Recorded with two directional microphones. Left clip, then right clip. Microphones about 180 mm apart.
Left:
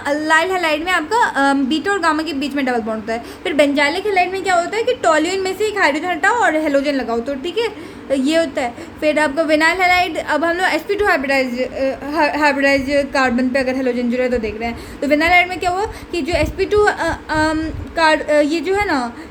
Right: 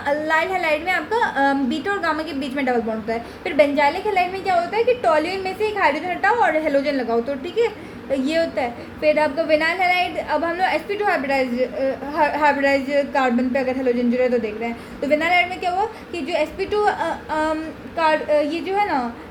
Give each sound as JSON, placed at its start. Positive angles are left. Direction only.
{"t": 0.0, "sound": "a woman's voice", "side_deg": 30}